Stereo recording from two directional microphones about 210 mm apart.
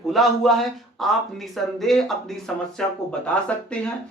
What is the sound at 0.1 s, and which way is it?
Speech, centre (ahead or behind).